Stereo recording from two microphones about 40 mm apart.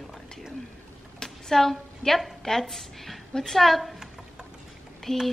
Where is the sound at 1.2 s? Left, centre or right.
Centre.